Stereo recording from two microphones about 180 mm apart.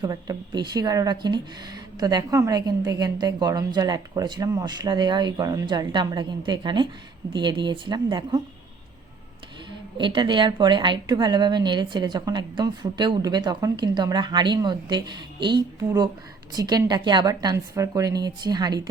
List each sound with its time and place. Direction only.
0.0 s speech: 20° right (ahead or behind)
10.0 s speech: 25° right (ahead or behind)